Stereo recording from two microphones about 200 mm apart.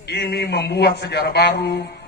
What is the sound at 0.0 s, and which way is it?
A man's voice, 55° left (ahead or behind).